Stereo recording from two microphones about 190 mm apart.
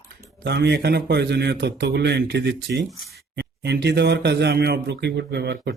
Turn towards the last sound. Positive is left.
turn(degrees=-60)  # may be behind; listen again after turning